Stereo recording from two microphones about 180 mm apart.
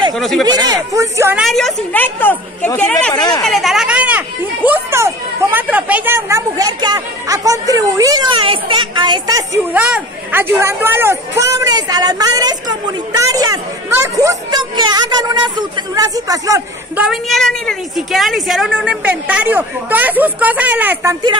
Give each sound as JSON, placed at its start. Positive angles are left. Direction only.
{"t": 0.2, "sound": "speech", "side_deg": 0}
{"t": 0.9, "sound": "a woman's voice", "side_deg": -15}
{"t": 1.4, "sound": "speech", "side_deg": 0}
{"t": 3.2, "sound": "speech", "side_deg": 25}
{"t": 3.4, "sound": "speech", "side_deg": 0}
{"t": 9.7, "sound": "a woman's voice", "side_deg": -5}
{"t": 17.0, "sound": "a woman's voice", "side_deg": 0}